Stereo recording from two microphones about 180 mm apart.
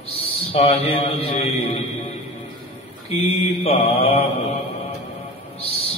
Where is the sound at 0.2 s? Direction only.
30° left (ahead or behind).